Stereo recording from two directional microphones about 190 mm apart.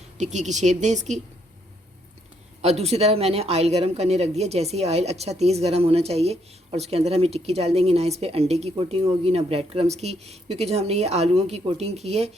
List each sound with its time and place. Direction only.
0.2 s speech: 40° right (ahead or behind)
2.6 s speech: 35° right (ahead or behind)